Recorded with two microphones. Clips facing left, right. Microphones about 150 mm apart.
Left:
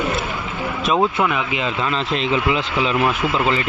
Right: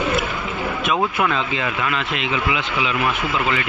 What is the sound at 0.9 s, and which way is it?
Speech, 20° left (ahead or behind).